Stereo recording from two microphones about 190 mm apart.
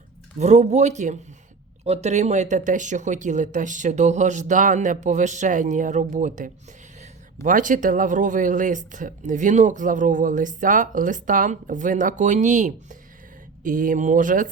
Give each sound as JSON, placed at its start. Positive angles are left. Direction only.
{"t": 0.3, "sound": "speech", "side_deg": -35}